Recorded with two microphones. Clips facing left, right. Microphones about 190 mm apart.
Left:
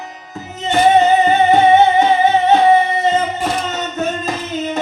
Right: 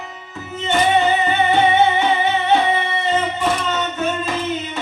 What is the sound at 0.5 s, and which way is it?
Music, 40° left (ahead or behind).